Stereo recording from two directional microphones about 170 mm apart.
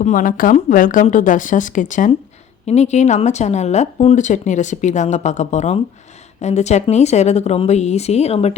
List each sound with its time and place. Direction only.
0.0 s speech: 50° left (ahead or behind)